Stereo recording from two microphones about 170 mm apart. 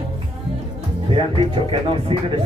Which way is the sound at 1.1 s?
30° right (ahead or behind).